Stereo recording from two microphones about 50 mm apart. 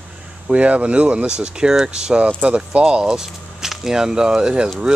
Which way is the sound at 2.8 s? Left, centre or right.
Centre.